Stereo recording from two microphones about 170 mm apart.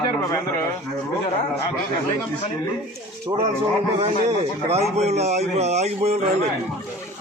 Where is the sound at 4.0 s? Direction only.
40° right (ahead or behind).